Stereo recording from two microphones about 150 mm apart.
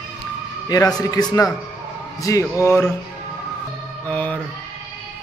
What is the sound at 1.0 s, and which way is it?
A man's voice, 25° left (ahead or behind).